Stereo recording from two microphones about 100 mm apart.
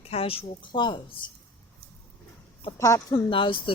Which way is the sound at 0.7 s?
50° left (ahead or behind).